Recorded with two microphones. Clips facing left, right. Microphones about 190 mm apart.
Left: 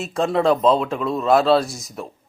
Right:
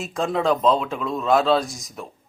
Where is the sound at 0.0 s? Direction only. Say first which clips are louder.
Left 4 dB; centre (ahead or behind).